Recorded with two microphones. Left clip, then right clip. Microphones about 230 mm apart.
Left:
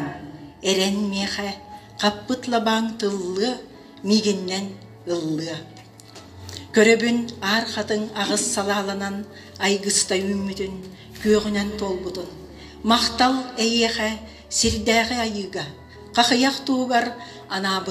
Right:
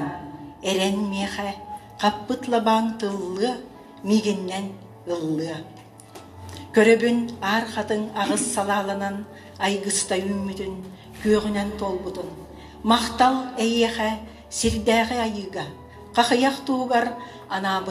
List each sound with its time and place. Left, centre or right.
0.0 s a woman's voice: left